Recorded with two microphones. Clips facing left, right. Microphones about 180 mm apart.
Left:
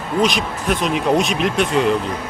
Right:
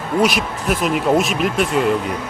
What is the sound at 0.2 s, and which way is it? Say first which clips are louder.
Speech: right 1 dB; 5° right (ahead or behind).